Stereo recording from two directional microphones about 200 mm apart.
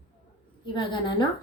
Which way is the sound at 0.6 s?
25° left (ahead or behind).